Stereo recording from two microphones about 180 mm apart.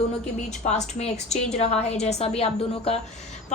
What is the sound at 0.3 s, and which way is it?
A woman's voice, 40° left (ahead or behind).